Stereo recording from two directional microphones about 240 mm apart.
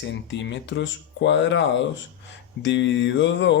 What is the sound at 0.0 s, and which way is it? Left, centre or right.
Speech, left.